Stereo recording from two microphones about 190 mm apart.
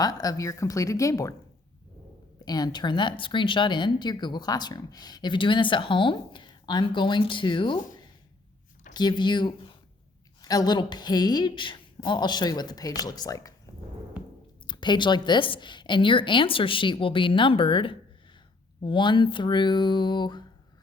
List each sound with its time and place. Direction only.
0.0 s speech: 20° left (ahead or behind)
2.4 s speech: 20° left (ahead or behind)
8.9 s speech: 20° left (ahead or behind)
14.7 s speech: 25° left (ahead or behind)